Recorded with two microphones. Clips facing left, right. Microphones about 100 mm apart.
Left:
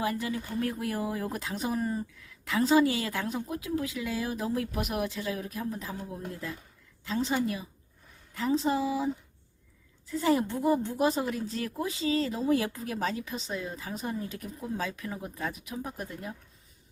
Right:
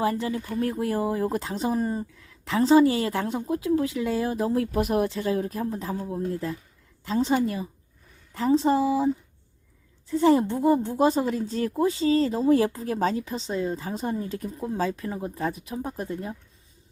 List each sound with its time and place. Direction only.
0.0 s a woman's voice: 30° right (ahead or behind)
7.0 s a woman's voice: 40° right (ahead or behind)
10.1 s a woman's voice: 35° right (ahead or behind)